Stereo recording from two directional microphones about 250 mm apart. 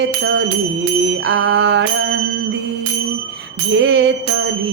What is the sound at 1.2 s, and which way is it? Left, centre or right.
Music, right.